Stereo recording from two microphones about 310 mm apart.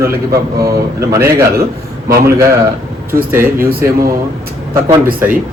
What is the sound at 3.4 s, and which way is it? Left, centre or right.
Speech, right.